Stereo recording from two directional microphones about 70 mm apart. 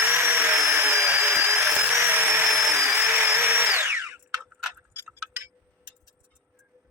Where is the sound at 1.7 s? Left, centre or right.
Right.